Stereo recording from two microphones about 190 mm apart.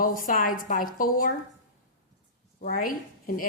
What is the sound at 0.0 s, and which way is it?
A woman's voice, 45° left (ahead or behind).